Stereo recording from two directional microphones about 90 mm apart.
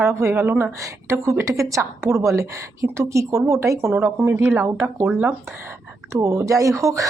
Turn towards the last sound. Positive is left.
turn(degrees=-35)  # may be behind; listen again after turning